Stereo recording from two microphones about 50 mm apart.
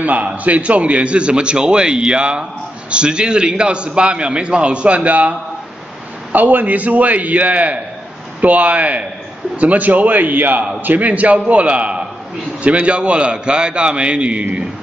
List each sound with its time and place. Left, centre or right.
0.0 s a man's voice: right
6.3 s a man's voice: right